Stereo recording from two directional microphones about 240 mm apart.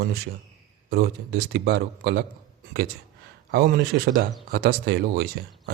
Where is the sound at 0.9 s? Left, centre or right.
Right.